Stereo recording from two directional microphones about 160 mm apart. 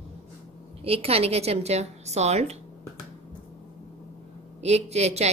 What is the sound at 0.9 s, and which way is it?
A woman's voice, 40° right (ahead or behind).